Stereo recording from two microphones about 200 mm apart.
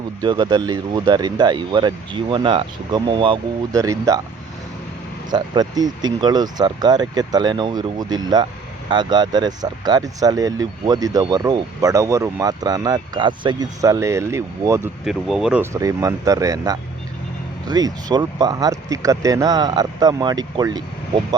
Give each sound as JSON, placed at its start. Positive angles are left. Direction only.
{"t": 0.2, "sound": "speech", "side_deg": -20}
{"t": 5.3, "sound": "speech", "side_deg": -20}
{"t": 15.0, "sound": "speech", "side_deg": 0}
{"t": 15.7, "sound": "speech", "side_deg": -15}